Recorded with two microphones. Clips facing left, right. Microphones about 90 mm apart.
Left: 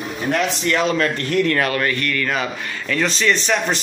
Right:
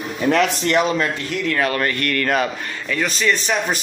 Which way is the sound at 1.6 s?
25° right (ahead or behind).